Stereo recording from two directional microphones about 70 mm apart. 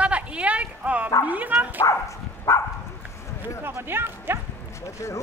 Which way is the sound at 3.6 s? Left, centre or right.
Right.